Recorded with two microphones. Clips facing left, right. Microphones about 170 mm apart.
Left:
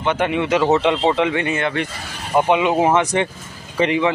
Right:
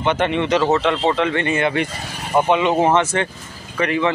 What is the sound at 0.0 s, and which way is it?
Speech, 5° left (ahead or behind).